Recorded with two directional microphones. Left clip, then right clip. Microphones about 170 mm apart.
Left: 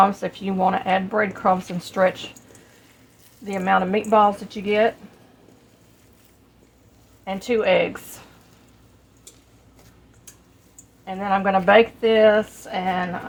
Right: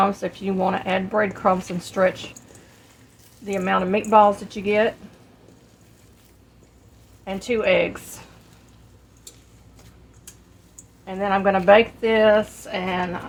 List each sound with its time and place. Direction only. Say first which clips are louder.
0.2 s a woman's voice: left 1 dB; 25° left (ahead or behind)
3.4 s a woman's voice: left 2 dB; 20° left (ahead or behind)
7.3 s a woman's voice: left 1 dB; 20° left (ahead or behind)
11.0 s a woman's voice: right 1 dB; 25° left (ahead or behind)